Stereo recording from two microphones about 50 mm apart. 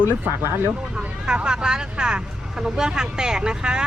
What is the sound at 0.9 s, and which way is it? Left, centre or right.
Speech, centre.